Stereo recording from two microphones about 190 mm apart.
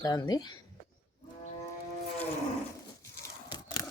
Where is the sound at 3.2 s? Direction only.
20° left (ahead or behind).